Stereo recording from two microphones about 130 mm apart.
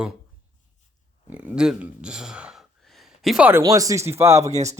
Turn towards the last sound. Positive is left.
turn(degrees=-25)  # may be behind; listen again after turning